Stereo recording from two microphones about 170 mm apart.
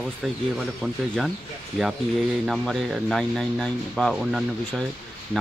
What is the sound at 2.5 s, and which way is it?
Speech, centre (ahead or behind).